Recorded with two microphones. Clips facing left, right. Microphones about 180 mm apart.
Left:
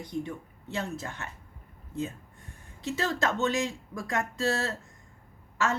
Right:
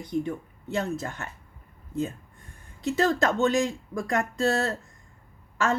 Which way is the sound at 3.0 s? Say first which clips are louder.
Right 6 dB; 45° right (ahead or behind).